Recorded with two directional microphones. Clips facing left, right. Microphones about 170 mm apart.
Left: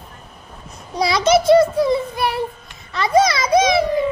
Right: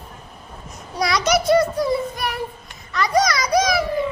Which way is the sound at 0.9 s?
25° left (ahead or behind).